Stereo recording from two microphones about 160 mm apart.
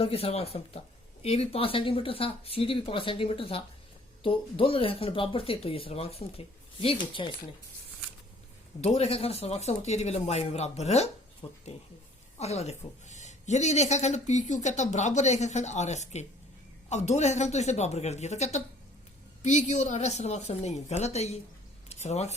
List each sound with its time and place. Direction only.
0.0 s speech: 40° left (ahead or behind)
8.8 s a woman's voice: 40° left (ahead or behind)